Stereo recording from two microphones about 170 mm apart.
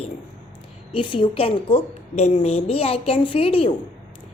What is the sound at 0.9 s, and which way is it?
A woman's voice, 30° left (ahead or behind).